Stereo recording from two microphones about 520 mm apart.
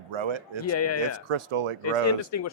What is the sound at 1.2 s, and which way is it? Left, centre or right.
Speech, right.